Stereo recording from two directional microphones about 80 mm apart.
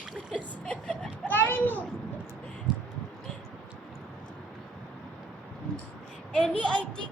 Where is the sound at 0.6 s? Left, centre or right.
Centre.